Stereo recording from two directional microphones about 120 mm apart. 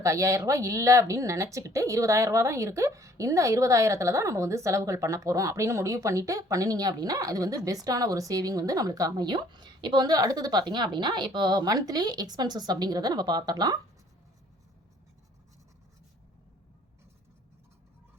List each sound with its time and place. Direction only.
0.0 s a woman's voice: 25° right (ahead or behind)